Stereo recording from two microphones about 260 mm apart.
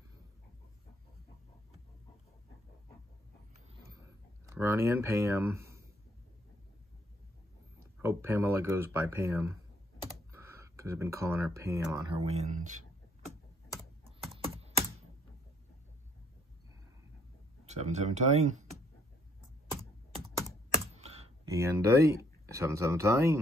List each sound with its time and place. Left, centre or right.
3.8 s a sound: centre
8.0 s speech: centre
10.0 s computer keyboard: centre
12.1 s speech: right
14.0 s typing: right
17.6 s speech: right
21.5 s speech: centre